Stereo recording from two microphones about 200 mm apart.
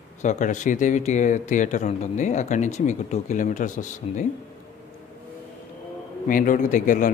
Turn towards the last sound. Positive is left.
turn(degrees=40)  # may be behind; listen again after turning